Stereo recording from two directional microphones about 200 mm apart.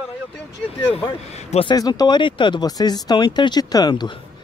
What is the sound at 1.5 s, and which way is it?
Speech, 25° left (ahead or behind).